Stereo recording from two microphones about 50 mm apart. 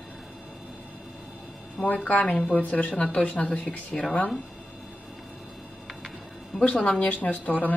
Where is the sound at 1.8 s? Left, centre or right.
Left.